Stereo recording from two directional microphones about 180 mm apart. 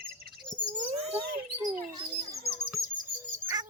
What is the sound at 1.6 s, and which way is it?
Bird, 20° right (ahead or behind).